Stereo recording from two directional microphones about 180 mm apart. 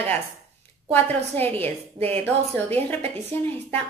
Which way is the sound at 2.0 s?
35° right (ahead or behind).